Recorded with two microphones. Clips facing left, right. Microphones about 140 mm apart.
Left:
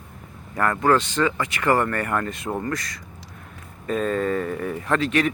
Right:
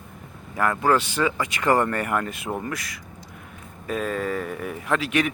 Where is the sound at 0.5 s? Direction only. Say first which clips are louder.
Left 1 dB; 5° right (ahead or behind).